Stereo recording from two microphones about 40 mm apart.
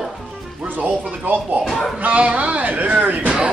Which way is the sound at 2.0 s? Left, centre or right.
Right.